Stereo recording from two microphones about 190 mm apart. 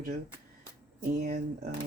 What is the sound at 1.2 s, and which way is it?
Speech, 50° right (ahead or behind).